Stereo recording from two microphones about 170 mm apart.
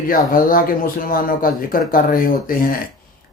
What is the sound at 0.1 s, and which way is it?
Speech, 55° left (ahead or behind).